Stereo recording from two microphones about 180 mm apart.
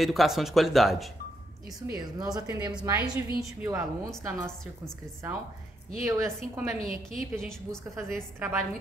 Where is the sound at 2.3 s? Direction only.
20° right (ahead or behind).